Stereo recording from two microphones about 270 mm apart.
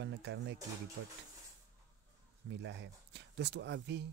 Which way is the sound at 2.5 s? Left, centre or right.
Right.